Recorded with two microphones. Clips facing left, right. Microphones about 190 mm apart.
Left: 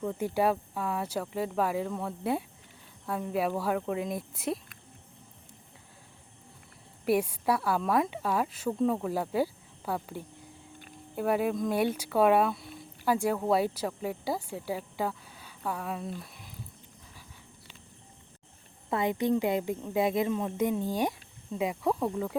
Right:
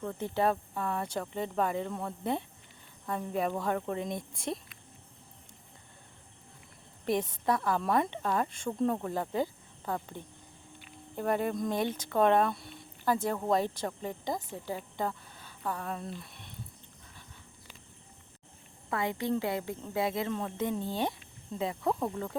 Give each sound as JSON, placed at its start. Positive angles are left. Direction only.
{"t": 0.0, "sound": "speech", "side_deg": 10}
{"t": 7.0, "sound": "speech", "side_deg": 10}
{"t": 18.9, "sound": "speech", "side_deg": 20}